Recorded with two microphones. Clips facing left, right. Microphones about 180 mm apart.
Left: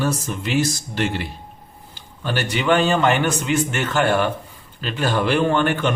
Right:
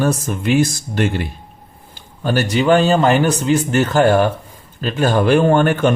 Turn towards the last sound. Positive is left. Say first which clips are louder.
# right 6 dB
turn(degrees=-45)  # may be behind; listen again after turning